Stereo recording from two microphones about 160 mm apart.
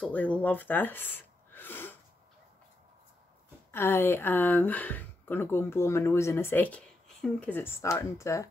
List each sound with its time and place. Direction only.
0.0 s speech: 10° left (ahead or behind)
3.7 s speech: 15° left (ahead or behind)